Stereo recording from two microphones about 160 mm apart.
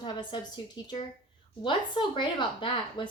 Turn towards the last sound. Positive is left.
turn(degrees=30)  # may be behind; listen again after turning